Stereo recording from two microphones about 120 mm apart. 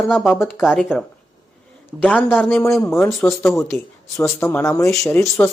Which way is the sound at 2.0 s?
15° left (ahead or behind).